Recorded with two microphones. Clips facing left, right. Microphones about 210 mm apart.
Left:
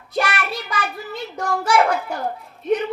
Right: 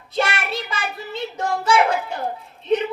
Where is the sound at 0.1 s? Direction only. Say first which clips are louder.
Even; 25° right (ahead or behind).